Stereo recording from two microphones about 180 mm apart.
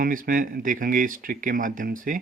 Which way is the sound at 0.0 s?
50° right (ahead or behind).